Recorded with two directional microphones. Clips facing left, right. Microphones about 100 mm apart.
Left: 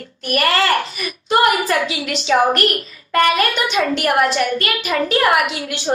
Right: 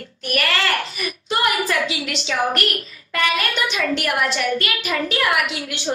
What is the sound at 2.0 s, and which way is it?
A woman's voice, 45° left (ahead or behind).